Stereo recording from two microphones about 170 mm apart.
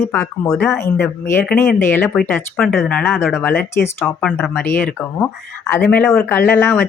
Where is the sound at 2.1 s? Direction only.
5° left (ahead or behind).